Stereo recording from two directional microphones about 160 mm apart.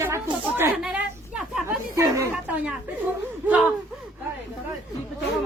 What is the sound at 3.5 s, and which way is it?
Speech, 10° right (ahead or behind).